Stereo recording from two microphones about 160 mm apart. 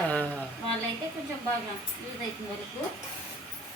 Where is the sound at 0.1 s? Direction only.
10° left (ahead or behind).